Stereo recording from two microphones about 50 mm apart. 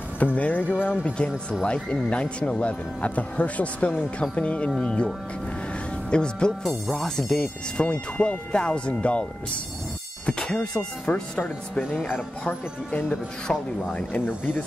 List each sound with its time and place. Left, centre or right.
0.2 s speech: left
6.0 s speech: centre
6.6 s speech: centre
7.8 s speech: left
11.3 s speech: centre
12.1 s speech: left
14.2 s speech: left